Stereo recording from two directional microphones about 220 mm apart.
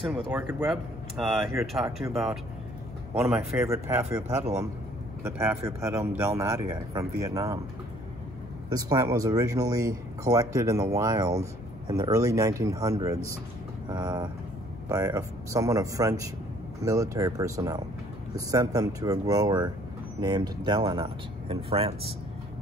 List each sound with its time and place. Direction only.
0.0 s speech: 5° right (ahead or behind)
3.2 s speech: 5° right (ahead or behind)
5.5 s speech: 10° right (ahead or behind)
8.6 s speech: 15° right (ahead or behind)